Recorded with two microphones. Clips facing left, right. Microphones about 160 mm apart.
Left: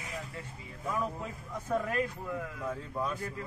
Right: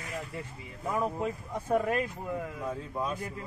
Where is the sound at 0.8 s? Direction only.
20° right (ahead or behind).